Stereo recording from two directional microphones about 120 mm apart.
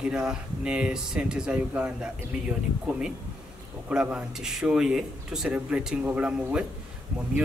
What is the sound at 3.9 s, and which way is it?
Speech, 10° right (ahead or behind).